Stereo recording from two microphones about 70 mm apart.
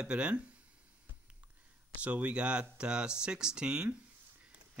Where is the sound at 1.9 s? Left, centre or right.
Right.